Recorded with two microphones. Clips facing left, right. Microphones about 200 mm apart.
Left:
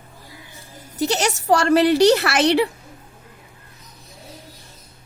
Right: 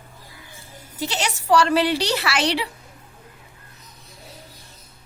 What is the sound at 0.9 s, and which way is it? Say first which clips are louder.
A woman's voice: left 6 dB; 45° left (ahead or behind).